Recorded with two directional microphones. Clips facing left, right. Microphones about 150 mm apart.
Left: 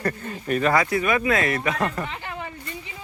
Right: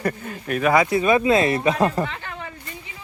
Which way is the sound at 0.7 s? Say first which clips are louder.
Right 4 dB; 25° right (ahead or behind).